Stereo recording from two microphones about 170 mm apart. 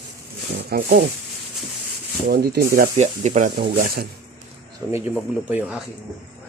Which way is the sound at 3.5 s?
65° right (ahead or behind).